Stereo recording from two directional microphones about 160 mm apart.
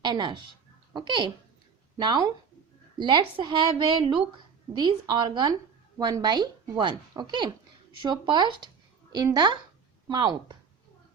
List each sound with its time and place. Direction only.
0.0 s a woman's voice: 30° right (ahead or behind)